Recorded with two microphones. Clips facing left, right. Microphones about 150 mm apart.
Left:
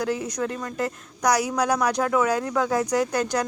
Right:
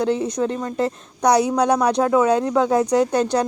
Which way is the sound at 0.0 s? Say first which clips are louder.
Right 6 dB; 25° right (ahead or behind).